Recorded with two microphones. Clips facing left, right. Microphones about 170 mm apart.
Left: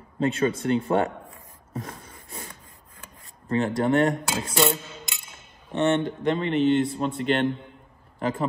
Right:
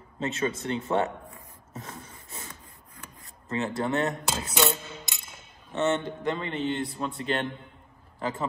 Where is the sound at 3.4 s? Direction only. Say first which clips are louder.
Left 6 dB; 30° left (ahead or behind).